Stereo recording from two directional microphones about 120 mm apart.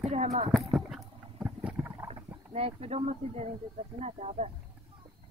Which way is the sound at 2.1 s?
55° right (ahead or behind).